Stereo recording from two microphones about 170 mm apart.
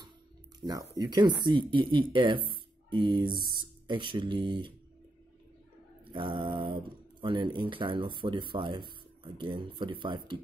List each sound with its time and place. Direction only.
0.6 s speech: 25° right (ahead or behind)
6.1 s speech: 30° right (ahead or behind)